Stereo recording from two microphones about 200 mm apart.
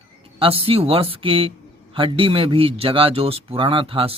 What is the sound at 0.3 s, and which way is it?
A man's voice, 25° right (ahead or behind).